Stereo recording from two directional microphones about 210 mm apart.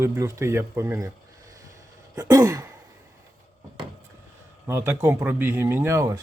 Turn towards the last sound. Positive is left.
turn(degrees=-15)  # may be behind; listen again after turning